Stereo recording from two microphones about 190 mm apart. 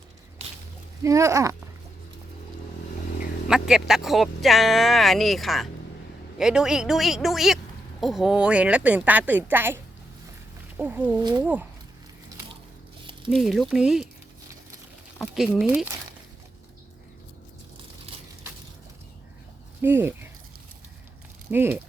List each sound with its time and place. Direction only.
1.0 s a woman's voice: 15° right (ahead or behind)
3.5 s a woman's voice: centre (ahead or behind)
11.2 s speech: 20° right (ahead or behind)
13.3 s speech: centre (ahead or behind)
15.2 s speech: centre (ahead or behind)
19.8 s a woman's voice: 10° right (ahead or behind)
21.5 s a woman's voice: 10° right (ahead or behind)